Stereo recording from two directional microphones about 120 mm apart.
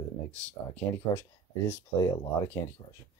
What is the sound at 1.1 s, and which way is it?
Speech, 35° left (ahead or behind).